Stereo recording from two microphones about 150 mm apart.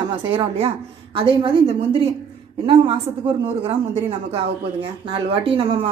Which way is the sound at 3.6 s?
35° right (ahead or behind).